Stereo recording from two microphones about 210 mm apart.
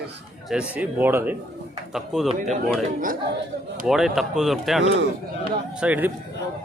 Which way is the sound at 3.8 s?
Centre (ahead or behind).